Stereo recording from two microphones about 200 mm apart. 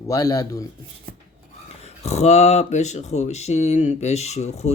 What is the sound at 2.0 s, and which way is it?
Speech, 35° left (ahead or behind).